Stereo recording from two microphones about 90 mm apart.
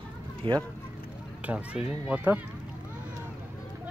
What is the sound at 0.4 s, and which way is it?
Speech, 70° right (ahead or behind).